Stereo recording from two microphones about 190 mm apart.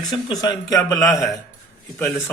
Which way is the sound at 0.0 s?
20° left (ahead or behind).